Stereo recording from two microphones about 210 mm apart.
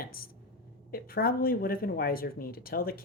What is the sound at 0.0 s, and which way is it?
Speech, 45° left (ahead or behind).